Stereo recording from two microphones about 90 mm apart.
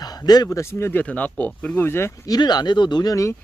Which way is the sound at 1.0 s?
15° left (ahead or behind).